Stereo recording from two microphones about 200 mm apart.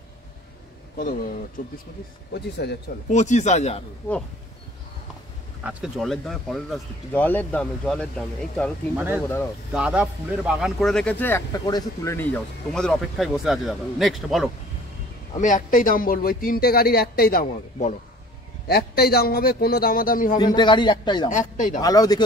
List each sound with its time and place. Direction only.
1.6 s speech: 45° left (ahead or behind)
2.3 s speech: 55° left (ahead or behind)
3.1 s speech: 35° left (ahead or behind)
5.6 s a man's voice: 5° right (ahead or behind)
8.9 s a man's voice: 10° right (ahead or behind)
15.3 s speech: 40° left (ahead or behind)
20.3 s a man's voice: 20° left (ahead or behind)
21.3 s speech: 40° left (ahead or behind)
21.7 s a man's voice: 20° left (ahead or behind)